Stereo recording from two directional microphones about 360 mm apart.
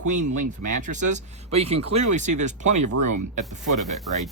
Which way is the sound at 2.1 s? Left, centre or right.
Centre.